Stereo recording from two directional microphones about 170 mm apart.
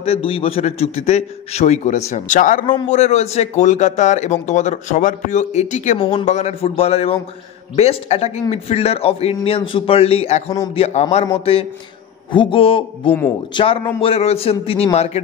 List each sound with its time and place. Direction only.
0.0 s a man's voice: 35° left (ahead or behind)
5.9 s a man's voice: 35° left (ahead or behind)